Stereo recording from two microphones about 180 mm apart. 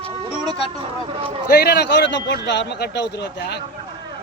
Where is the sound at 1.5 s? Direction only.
60° left (ahead or behind).